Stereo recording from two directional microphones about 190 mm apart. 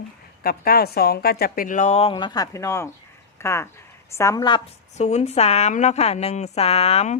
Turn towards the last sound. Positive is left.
turn(degrees=35)  # may be behind; listen again after turning